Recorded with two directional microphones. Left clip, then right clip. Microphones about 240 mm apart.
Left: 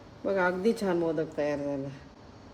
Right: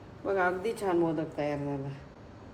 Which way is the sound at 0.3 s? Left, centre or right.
Left.